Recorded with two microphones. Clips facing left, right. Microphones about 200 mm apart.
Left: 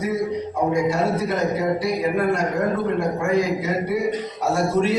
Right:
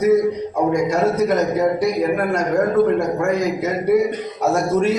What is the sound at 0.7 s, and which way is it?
A man's voice, 45° right (ahead or behind).